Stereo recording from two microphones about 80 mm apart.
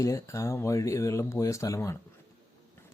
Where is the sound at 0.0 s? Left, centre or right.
Left.